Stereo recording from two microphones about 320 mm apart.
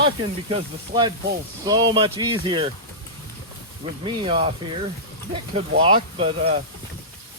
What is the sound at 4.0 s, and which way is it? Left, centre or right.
Speech, centre.